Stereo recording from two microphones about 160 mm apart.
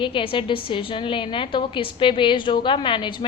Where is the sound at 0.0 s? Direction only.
35° left (ahead or behind).